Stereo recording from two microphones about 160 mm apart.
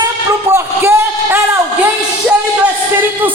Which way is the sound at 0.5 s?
15° right (ahead or behind).